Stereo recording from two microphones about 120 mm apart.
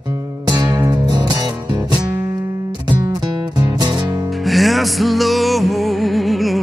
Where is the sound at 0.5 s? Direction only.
35° right (ahead or behind).